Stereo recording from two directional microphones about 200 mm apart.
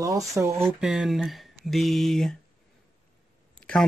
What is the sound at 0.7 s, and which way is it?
Speech, centre (ahead or behind).